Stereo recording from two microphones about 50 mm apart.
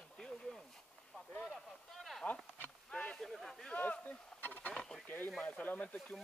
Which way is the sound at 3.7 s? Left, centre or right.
Left.